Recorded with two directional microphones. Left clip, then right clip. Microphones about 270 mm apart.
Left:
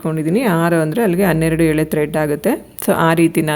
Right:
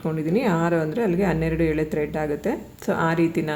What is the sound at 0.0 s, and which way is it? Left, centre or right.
Speech, left.